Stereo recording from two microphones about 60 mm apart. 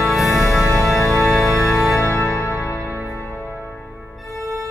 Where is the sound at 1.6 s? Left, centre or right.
Left.